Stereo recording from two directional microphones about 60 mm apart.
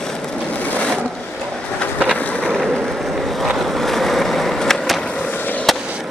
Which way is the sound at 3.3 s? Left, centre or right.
Centre.